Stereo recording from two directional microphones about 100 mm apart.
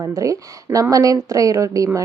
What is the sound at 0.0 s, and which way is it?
A woman's voice, 35° right (ahead or behind).